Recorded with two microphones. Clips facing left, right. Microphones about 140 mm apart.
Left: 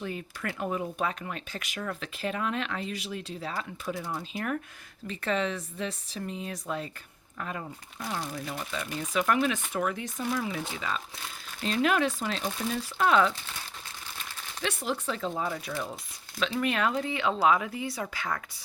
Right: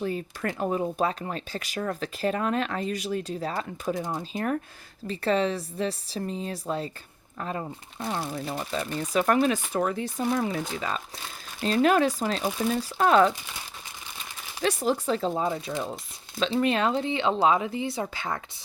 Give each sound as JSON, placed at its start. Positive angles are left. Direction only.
{"t": 0.0, "sound": "speech", "side_deg": -35}
{"t": 14.6, "sound": "speech", "side_deg": -40}